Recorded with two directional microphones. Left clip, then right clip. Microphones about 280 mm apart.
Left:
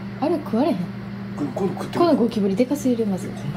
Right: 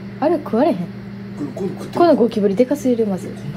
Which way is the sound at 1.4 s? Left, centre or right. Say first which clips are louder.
Left 1 dB; centre.